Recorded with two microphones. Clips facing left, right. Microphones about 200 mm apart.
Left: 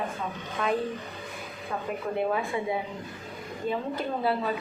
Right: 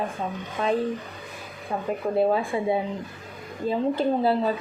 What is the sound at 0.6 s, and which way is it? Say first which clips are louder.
Speech: right 3 dB; 30° right (ahead or behind).